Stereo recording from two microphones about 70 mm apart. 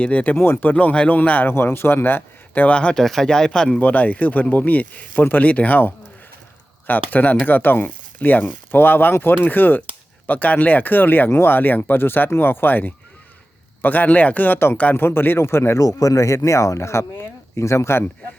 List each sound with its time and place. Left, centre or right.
0.0 s speech: left
0.3 s speech: left
1.5 s speech: left; by 3.8 s centre
3.8 s a man's voice: left
15.8 s a man's voice: left